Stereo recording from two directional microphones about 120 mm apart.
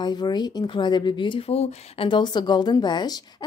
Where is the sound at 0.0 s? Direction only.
35° left (ahead or behind); by 2.0 s 55° left (ahead or behind).